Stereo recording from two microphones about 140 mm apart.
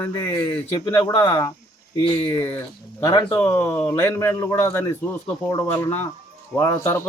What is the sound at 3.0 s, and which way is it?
Speech, 30° left (ahead or behind).